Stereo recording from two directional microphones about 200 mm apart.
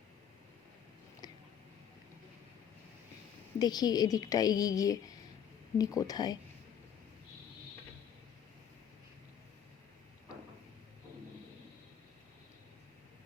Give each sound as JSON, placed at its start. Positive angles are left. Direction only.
{"t": 3.6, "sound": "a woman's voice", "side_deg": 20}